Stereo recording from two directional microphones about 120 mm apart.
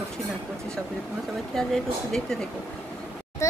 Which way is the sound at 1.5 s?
5° left (ahead or behind).